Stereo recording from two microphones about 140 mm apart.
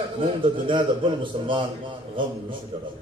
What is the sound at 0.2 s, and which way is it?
A man's voice, 35° right (ahead or behind).